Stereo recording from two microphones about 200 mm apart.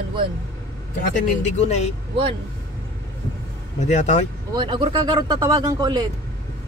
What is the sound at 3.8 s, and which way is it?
Speech, 35° left (ahead or behind).